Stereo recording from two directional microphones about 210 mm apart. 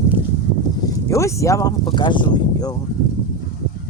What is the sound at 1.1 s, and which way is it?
Speech, 15° left (ahead or behind).